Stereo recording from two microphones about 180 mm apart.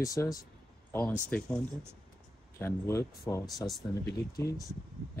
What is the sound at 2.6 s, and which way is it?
Speech, 15° left (ahead or behind).